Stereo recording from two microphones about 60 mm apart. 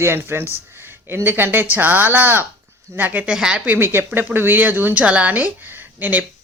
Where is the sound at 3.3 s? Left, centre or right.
Centre.